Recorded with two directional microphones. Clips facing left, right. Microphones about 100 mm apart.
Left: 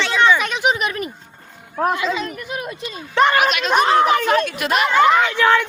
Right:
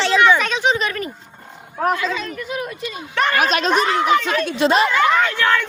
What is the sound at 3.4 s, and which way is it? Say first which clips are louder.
Speech: even; 35° right (ahead or behind).